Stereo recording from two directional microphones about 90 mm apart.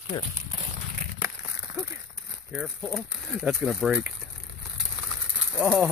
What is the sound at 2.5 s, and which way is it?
Speech, 5° right (ahead or behind).